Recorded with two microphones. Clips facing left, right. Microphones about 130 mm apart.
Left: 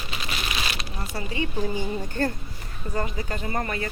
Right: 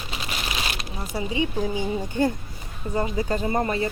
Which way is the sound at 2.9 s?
25° right (ahead or behind).